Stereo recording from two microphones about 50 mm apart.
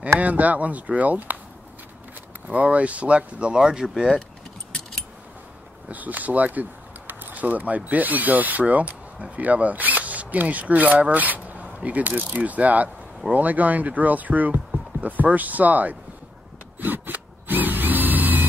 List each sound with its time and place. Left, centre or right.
0.2 s speech: right
2.4 s speech: right; by 4.1 s centre
5.9 s speech: right
16.8 s tools: right